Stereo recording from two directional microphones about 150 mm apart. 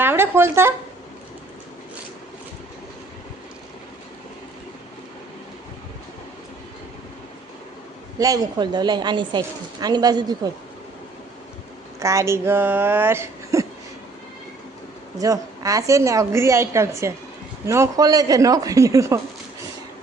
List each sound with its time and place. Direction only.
0.0 s speech: 15° right (ahead or behind)
8.2 s a woman's voice: 25° right (ahead or behind)
11.9 s speech: 20° right (ahead or behind)
15.2 s a woman's voice: 20° right (ahead or behind)